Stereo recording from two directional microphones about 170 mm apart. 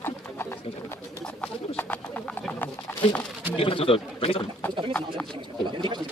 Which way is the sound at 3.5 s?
35° left (ahead or behind).